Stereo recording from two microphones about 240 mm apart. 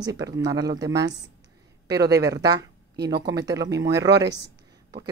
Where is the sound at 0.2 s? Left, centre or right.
Centre.